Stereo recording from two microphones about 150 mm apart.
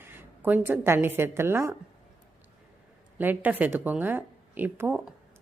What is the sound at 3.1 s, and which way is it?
Speech, 10° right (ahead or behind).